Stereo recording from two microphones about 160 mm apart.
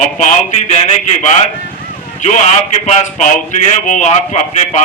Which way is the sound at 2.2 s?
45° left (ahead or behind).